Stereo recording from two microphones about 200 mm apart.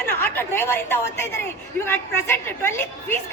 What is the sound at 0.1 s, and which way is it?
A woman's voice, 10° left (ahead or behind).